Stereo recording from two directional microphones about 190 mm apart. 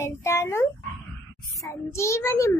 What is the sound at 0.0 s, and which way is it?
Dog, 15° left (ahead or behind).